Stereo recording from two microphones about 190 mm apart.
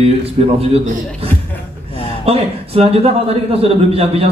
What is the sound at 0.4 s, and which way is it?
Speech, 30° right (ahead or behind).